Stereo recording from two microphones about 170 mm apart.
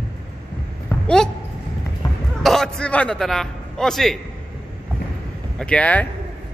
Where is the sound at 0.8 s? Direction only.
5° left (ahead or behind).